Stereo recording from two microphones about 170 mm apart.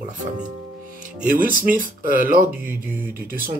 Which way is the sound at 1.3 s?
55° right (ahead or behind).